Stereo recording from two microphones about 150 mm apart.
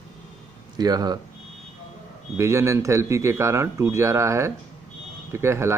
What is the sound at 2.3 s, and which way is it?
A man's voice, 20° right (ahead or behind).